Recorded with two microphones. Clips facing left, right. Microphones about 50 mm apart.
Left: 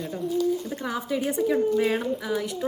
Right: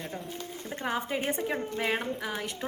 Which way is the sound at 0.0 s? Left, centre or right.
Right.